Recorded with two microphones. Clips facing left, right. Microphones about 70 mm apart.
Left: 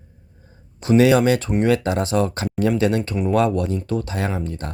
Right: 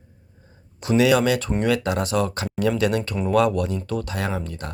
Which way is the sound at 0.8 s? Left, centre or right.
Left.